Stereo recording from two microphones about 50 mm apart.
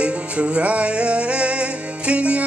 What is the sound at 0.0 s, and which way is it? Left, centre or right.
Music, right.